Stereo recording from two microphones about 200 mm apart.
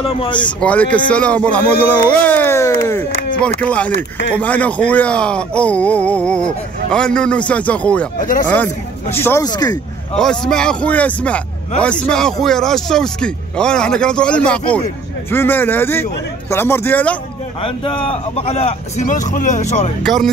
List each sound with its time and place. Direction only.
0.0 s speech: 30° left (ahead or behind)
0.5 s speech: 5° left (ahead or behind)
8.2 s speech: 40° left (ahead or behind)
8.5 s speech: 10° left (ahead or behind)
10.1 s speech: 5° left (ahead or behind)
17.6 s speech: 25° left (ahead or behind)
20.0 s speech: centre (ahead or behind)